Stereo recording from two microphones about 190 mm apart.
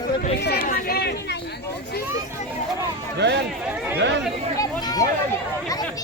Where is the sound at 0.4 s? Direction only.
55° left (ahead or behind).